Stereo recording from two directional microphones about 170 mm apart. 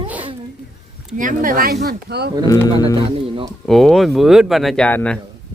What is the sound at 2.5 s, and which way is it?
Speech, 20° left (ahead or behind).